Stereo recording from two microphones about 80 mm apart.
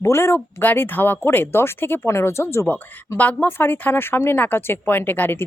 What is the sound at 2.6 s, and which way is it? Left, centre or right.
Speech, left.